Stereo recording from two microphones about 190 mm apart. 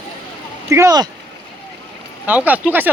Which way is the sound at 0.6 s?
15° right (ahead or behind).